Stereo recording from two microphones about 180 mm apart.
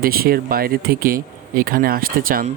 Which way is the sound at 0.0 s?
55° right (ahead or behind).